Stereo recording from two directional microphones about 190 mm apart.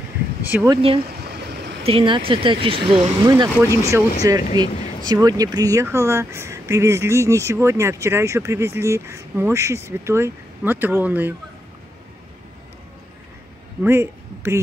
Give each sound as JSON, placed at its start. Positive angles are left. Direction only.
{"t": 0.7, "sound": "speech", "side_deg": -30}
{"t": 13.8, "sound": "speech", "side_deg": -15}